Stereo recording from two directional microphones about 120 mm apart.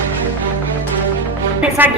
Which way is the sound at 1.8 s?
15° right (ahead or behind).